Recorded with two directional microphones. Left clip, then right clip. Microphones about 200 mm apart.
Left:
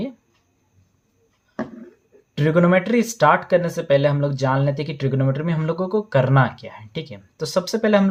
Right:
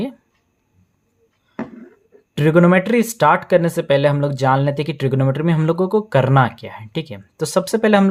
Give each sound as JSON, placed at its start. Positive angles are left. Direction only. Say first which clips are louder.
{"t": 2.3, "sound": "speech", "louder": "right 3 dB", "side_deg": -35}